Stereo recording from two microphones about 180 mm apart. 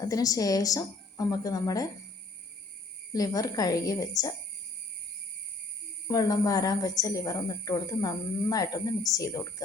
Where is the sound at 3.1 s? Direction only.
20° left (ahead or behind).